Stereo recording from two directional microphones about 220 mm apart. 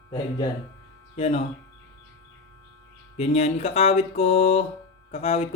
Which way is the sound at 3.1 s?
30° left (ahead or behind).